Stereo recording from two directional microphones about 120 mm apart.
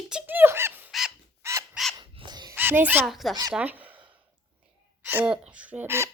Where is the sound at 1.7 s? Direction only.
Centre (ahead or behind).